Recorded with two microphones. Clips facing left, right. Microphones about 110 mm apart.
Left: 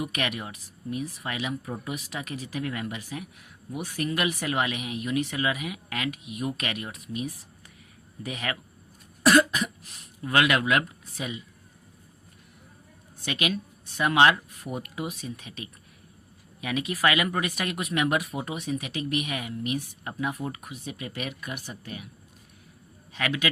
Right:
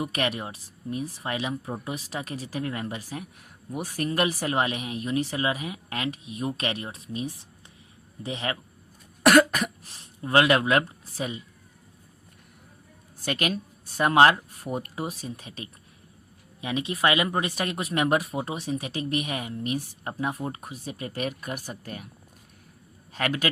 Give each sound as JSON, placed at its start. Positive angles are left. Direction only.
{"t": 0.0, "sound": "speech", "side_deg": -35}
{"t": 9.8, "sound": "speech", "side_deg": -30}
{"t": 13.2, "sound": "speech", "side_deg": -40}
{"t": 23.1, "sound": "speech", "side_deg": -40}